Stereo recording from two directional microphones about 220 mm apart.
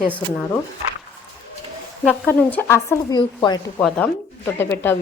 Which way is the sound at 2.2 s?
10° left (ahead or behind).